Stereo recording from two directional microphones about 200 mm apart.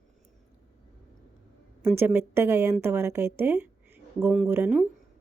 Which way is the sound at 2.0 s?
10° right (ahead or behind).